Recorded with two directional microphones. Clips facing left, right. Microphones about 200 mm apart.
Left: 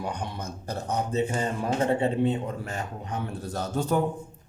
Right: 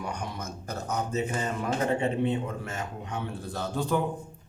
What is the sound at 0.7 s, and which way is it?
A man's voice, 30° left (ahead or behind).